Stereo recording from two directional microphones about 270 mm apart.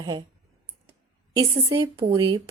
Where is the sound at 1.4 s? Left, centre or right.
Centre.